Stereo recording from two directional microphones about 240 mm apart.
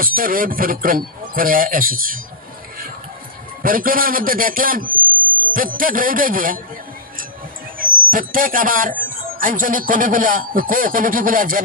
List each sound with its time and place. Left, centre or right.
0.0 s speech: right
3.6 s a man's voice: right
7.8 s speech: right